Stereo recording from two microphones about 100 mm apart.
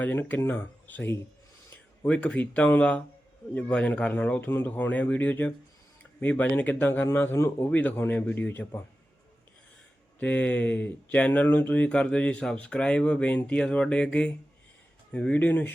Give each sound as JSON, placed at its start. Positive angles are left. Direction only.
{"t": 0.0, "sound": "speech", "side_deg": 20}
{"t": 10.2, "sound": "speech", "side_deg": 15}